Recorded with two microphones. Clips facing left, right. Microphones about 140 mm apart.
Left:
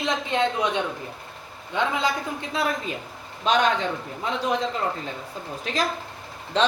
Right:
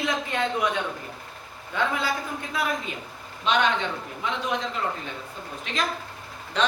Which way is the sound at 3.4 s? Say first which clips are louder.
Left 2 dB; 40° left (ahead or behind).